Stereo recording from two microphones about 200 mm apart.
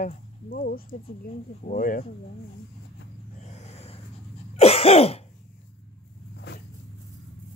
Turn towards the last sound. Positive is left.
turn(degrees=60)  # may be behind; listen again after turning